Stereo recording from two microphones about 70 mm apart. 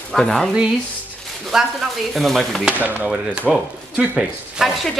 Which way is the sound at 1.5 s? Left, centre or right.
Centre.